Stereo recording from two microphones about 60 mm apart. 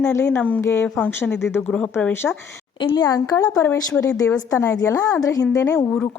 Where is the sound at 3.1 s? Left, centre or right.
Left.